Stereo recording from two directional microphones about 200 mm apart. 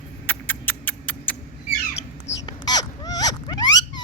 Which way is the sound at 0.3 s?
10° left (ahead or behind).